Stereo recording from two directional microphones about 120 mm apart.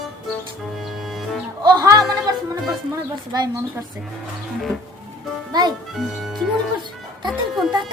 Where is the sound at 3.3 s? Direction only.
35° right (ahead or behind).